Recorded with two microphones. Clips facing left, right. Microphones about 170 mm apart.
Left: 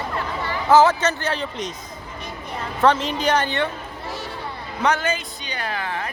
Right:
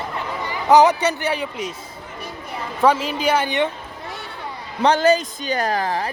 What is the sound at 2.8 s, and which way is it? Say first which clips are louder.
Speech: right 1 dB; 10° right (ahead or behind).